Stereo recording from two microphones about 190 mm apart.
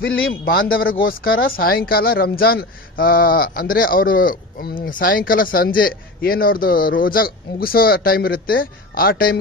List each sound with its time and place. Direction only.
0.0 s speech: 55° left (ahead or behind)